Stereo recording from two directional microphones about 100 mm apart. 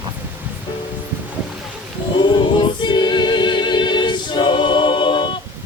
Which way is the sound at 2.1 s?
50° left (ahead or behind).